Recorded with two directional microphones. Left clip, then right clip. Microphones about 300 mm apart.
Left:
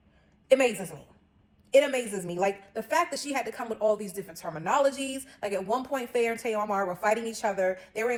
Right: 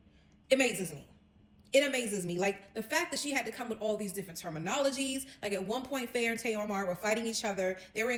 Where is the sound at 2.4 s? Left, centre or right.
Centre.